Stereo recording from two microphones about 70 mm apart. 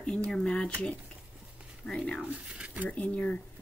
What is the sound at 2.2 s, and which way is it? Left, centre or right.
Speech, centre.